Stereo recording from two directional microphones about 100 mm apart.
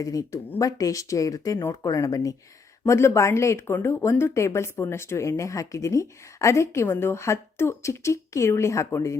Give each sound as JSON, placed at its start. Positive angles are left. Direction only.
{"t": 0.0, "sound": "speech", "side_deg": 35}